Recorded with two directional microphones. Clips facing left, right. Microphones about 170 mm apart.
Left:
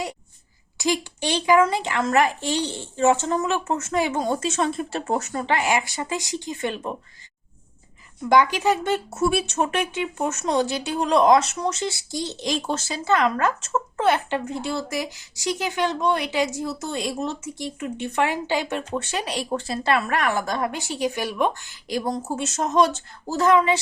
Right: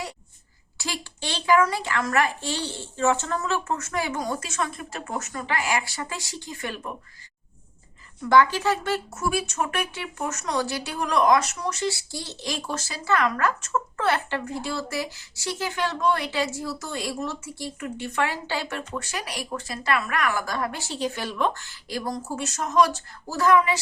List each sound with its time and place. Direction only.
0.8 s speech: 15° left (ahead or behind)
8.3 s speech: 15° left (ahead or behind)